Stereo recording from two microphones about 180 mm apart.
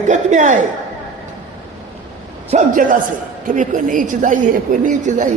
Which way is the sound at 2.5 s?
45° right (ahead or behind).